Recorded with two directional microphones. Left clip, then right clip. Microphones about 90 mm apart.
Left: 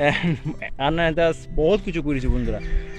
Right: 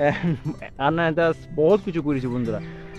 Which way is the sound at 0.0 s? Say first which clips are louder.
Left 1 dB; 10° right (ahead or behind).